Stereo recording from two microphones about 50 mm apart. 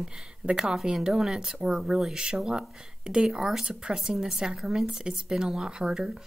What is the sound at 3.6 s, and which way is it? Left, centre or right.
Speech, centre.